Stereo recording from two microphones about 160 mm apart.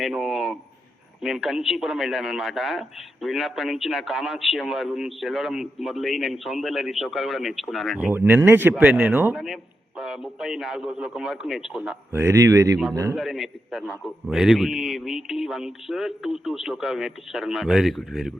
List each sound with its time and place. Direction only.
0.0 s a man's voice: centre (ahead or behind)
7.9 s a man's voice: 10° right (ahead or behind)
12.1 s speech: 20° right (ahead or behind)
13.1 s a man's voice: centre (ahead or behind)